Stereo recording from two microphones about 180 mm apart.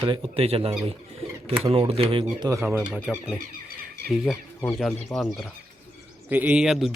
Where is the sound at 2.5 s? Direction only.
15° right (ahead or behind).